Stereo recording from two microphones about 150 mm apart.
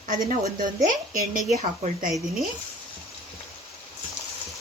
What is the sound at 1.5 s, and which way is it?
Speech, 50° right (ahead or behind).